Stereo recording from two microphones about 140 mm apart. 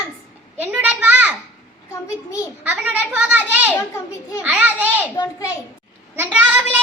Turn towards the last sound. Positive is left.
turn(degrees=-10)  # may be behind; listen again after turning